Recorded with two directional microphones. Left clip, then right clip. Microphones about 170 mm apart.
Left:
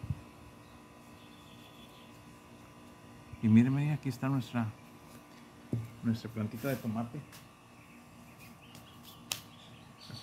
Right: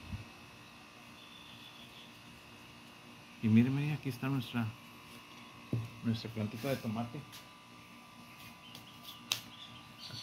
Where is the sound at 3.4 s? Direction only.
65° left (ahead or behind).